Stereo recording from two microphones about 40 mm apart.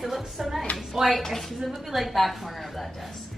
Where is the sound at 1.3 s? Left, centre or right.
Centre.